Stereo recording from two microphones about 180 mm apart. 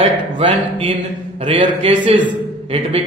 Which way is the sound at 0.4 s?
30° right (ahead or behind).